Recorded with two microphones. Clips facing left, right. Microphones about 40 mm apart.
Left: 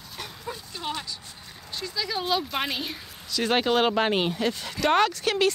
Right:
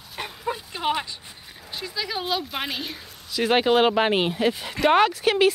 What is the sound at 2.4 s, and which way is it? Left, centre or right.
Speech, centre.